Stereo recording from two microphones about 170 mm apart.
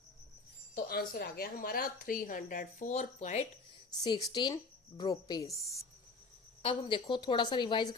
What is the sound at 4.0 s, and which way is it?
Speech, 25° left (ahead or behind).